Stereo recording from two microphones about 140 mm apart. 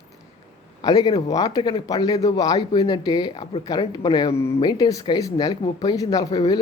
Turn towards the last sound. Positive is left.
turn(degrees=25)  # may be behind; listen again after turning